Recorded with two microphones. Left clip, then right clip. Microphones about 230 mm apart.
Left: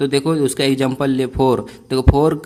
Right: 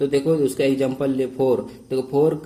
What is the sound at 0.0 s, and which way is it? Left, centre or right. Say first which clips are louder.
A man's voice: left 2 dB; left.